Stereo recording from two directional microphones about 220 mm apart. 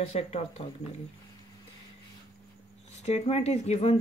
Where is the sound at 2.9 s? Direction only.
30° left (ahead or behind).